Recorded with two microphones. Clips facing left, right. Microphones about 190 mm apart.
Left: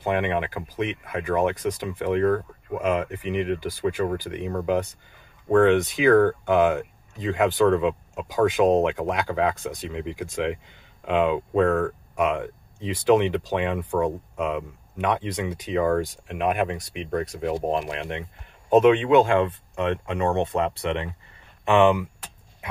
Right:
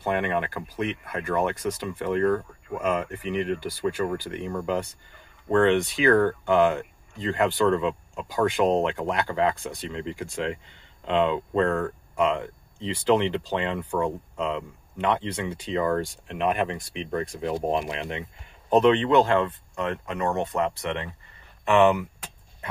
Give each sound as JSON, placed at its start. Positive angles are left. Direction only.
{"t": 0.0, "sound": "speech", "side_deg": 15}
{"t": 18.7, "sound": "speech", "side_deg": 10}